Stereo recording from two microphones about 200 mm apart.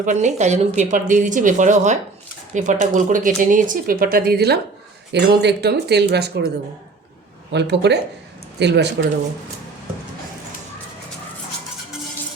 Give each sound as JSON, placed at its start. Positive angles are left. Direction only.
{"t": 0.0, "sound": "a woman's voice", "side_deg": -40}
{"t": 7.5, "sound": "speech", "side_deg": -60}